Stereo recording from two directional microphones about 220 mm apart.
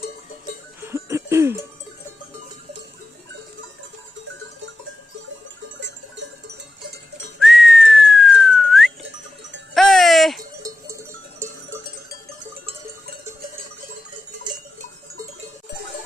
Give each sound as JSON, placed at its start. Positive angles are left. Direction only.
{"t": 0.8, "sound": "music", "side_deg": -10}
{"t": 5.8, "sound": "cowbell", "side_deg": -55}
{"t": 7.3, "sound": "whistling", "side_deg": 0}
{"t": 9.7, "sound": "music", "side_deg": 0}
{"t": 10.6, "sound": "cowbell", "side_deg": -15}